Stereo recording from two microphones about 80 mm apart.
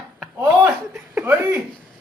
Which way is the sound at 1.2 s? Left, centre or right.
Right.